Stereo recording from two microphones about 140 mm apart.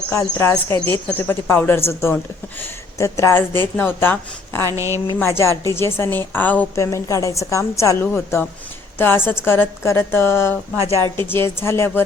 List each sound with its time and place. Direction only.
0.1 s speech: 20° left (ahead or behind)
4.6 s a woman's voice: 20° right (ahead or behind)
5.2 s a woman's voice: 20° left (ahead or behind)